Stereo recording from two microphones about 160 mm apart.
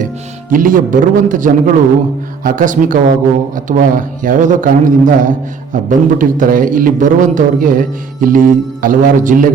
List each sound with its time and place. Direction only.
0.5 s a man's voice: 60° right (ahead or behind)